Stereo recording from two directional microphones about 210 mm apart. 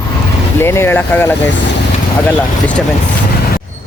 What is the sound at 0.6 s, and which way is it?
Speech, 10° left (ahead or behind).